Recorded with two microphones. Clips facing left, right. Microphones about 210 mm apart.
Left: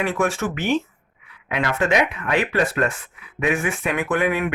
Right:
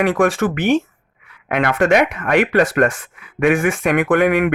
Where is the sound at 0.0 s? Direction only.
90° right.